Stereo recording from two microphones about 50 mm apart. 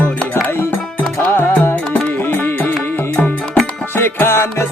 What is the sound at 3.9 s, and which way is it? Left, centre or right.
Music, left.